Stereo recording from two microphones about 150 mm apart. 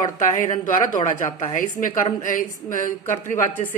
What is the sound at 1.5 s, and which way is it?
Speech, 65° left (ahead or behind).